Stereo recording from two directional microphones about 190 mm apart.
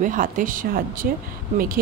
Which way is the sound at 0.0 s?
45° right (ahead or behind).